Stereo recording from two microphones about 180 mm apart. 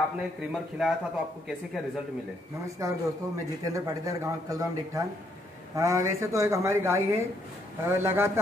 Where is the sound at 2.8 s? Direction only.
15° right (ahead or behind).